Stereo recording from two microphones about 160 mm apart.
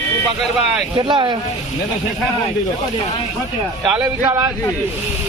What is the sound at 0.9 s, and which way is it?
Speech, 30° right (ahead or behind).